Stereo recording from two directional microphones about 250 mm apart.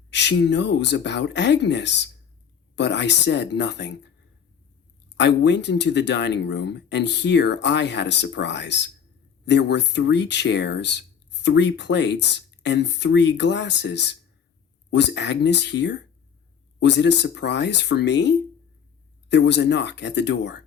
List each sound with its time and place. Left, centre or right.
0.1 s speech: left
5.1 s speech: left